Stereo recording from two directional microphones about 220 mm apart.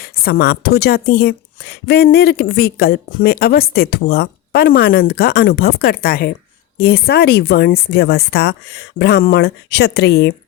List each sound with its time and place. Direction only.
0.0 s a woman's voice: 45° left (ahead or behind)